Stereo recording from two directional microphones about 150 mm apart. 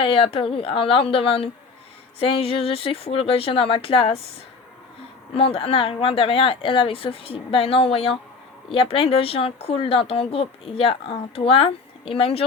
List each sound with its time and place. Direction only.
0.0 s speech: 35° left (ahead or behind)
5.3 s speech: 40° left (ahead or behind)